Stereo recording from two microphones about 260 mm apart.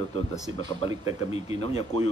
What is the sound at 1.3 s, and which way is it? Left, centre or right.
Speech, left.